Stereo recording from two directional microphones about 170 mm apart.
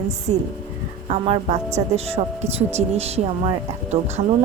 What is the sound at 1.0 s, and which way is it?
A woman's voice, 35° right (ahead or behind).